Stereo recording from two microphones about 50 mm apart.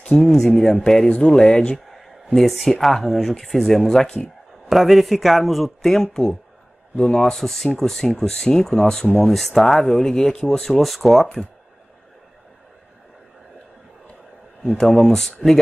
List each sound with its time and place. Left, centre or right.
0.2 s speech: centre
1.9 s a sound: centre
2.3 s speech: centre
7.3 s speech: centre
10.8 s speech: centre
14.8 s speech: centre